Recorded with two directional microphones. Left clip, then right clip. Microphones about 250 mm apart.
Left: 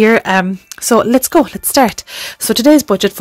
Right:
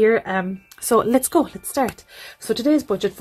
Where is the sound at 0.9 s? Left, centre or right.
Left.